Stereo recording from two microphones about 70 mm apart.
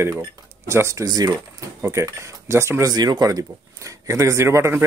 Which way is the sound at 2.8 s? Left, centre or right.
Right.